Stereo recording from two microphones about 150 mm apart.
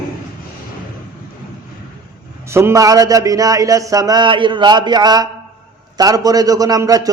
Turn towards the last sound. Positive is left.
turn(degrees=-25)  # may be behind; listen again after turning